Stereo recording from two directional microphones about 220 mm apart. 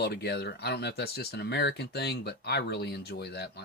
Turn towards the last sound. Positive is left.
turn(degrees=50)  # may be behind; listen again after turning